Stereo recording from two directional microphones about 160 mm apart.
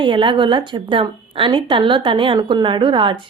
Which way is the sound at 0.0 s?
30° right (ahead or behind).